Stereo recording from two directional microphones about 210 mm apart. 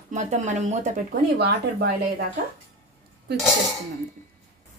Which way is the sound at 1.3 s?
50° right (ahead or behind).